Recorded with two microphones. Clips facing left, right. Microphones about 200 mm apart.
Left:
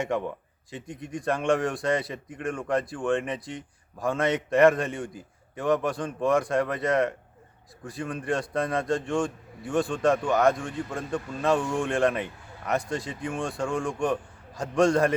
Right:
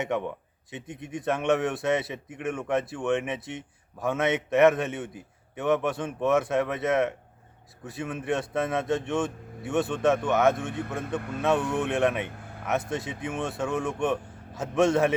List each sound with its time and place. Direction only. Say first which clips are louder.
0.0 s speech: left 1 dB; 5° left (ahead or behind)
10.7 s a man's voice: even; 60° right (ahead or behind)
11.7 s speech: even; 5° right (ahead or behind)